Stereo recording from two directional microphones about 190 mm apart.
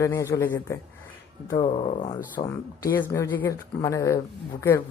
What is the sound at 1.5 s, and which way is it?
Speech, 30° left (ahead or behind).